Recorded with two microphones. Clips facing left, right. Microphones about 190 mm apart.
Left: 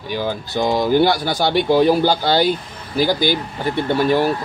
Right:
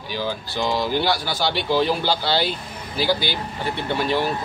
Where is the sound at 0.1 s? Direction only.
50° left (ahead or behind).